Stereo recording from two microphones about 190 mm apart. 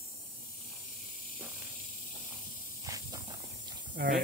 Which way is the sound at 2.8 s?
20° right (ahead or behind).